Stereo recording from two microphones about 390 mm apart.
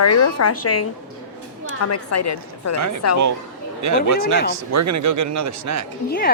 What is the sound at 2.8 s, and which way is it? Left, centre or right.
Speech, right.